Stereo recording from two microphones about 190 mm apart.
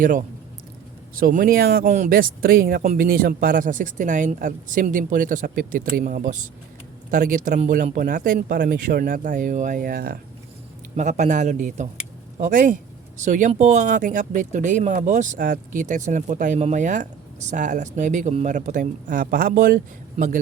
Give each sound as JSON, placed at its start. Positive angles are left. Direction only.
{"t": 0.0, "sound": "speech", "side_deg": -45}
{"t": 10.9, "sound": "speech", "side_deg": -40}